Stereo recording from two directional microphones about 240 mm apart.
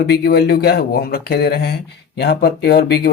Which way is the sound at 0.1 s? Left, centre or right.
Left.